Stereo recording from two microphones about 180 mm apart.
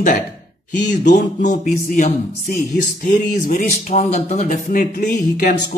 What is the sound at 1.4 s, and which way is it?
Music, 45° left (ahead or behind).